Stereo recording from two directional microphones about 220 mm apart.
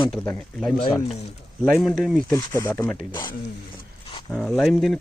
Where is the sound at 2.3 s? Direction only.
15° left (ahead or behind).